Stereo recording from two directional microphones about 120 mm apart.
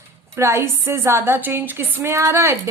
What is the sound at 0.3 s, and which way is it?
A woman's voice, 25° right (ahead or behind).